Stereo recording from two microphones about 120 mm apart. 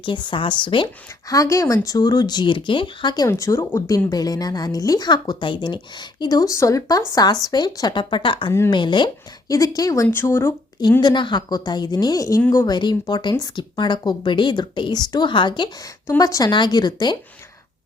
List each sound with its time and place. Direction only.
0.0 s speech: 40° left (ahead or behind)
1.3 s speech: 25° left (ahead or behind)
3.2 s speech: 25° left (ahead or behind)
11.0 s speech: 40° left (ahead or behind)
16.0 s speech: 30° left (ahead or behind)